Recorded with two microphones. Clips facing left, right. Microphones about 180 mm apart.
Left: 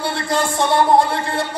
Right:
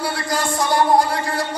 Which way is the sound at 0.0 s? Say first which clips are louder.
Left 2 dB; 25° left (ahead or behind).